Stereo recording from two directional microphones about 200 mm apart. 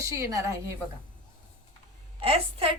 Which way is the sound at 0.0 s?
15° right (ahead or behind).